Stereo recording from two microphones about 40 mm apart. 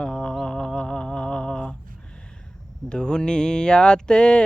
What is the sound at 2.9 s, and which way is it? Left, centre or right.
Mantra, left.